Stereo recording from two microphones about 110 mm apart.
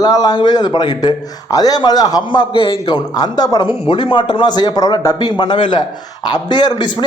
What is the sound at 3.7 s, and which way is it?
Speech, 50° left (ahead or behind).